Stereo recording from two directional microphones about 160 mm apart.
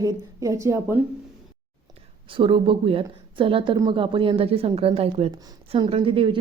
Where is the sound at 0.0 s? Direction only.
20° right (ahead or behind).